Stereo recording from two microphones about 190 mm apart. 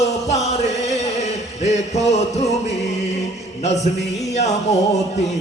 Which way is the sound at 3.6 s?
35° left (ahead or behind).